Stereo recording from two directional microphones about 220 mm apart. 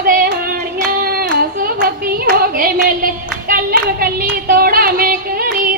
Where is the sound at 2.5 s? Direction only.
40° right (ahead or behind).